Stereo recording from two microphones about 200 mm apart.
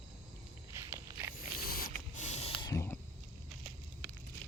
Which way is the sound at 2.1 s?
35° left (ahead or behind).